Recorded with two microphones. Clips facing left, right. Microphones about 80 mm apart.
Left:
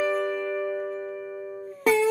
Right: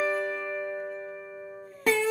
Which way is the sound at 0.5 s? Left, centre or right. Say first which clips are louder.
Left 5 dB; centre.